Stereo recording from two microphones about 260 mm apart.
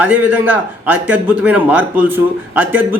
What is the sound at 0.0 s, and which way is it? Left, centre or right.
A man's voice, centre.